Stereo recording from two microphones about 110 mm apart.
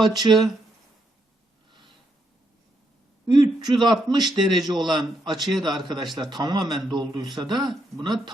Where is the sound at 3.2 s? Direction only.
40° right (ahead or behind).